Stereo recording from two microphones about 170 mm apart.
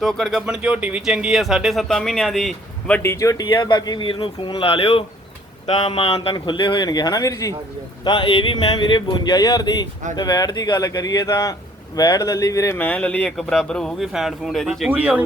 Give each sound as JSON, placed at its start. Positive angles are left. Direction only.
{"t": 0.0, "sound": "speech", "side_deg": 0}
{"t": 3.0, "sound": "speech", "side_deg": 15}